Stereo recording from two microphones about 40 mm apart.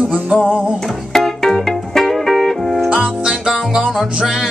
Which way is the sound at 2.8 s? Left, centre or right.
Right.